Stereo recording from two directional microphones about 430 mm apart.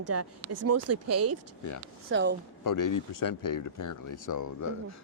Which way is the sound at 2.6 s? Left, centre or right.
Left.